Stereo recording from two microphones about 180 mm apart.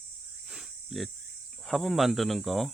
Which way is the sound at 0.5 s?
Centre (ahead or behind).